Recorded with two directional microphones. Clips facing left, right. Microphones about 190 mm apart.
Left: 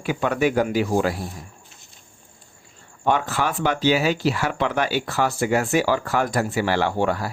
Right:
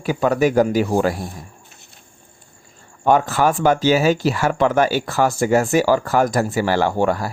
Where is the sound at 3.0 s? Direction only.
45° right (ahead or behind).